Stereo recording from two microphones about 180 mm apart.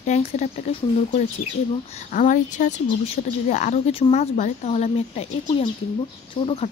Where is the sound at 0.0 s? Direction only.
40° left (ahead or behind).